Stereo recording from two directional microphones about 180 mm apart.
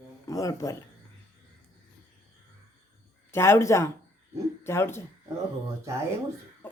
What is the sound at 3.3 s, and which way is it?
Speech, 15° left (ahead or behind).